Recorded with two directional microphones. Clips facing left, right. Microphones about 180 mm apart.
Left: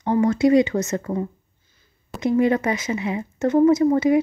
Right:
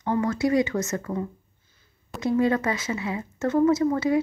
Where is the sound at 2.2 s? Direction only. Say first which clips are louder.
Left 3 dB; 20° left (ahead or behind).